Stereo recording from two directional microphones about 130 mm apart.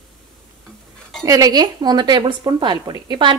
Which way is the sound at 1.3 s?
30° right (ahead or behind).